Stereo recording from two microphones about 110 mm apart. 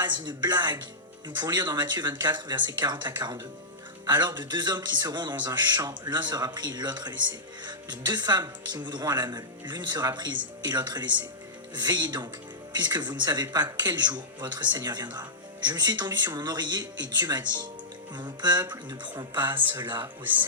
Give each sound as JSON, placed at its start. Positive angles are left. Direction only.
{"t": 0.0, "sound": "a man's voice", "side_deg": -40}